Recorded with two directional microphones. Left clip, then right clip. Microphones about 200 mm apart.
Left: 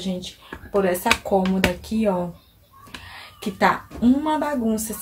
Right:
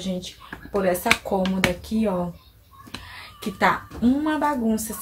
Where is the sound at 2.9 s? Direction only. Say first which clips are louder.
Even; 15° left (ahead or behind).